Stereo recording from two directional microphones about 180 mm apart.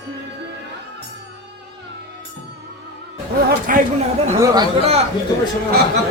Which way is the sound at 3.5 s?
50° right (ahead or behind).